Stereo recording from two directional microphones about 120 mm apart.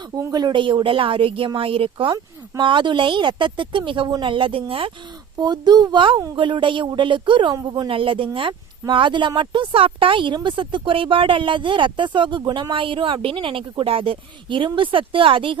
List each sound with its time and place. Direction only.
0.2 s speech: 35° right (ahead or behind)
5.4 s a woman's voice: 35° right (ahead or behind)
7.9 s speech: 45° right (ahead or behind)